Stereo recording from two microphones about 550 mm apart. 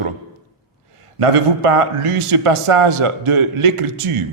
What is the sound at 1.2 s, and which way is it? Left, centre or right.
A man's voice, right.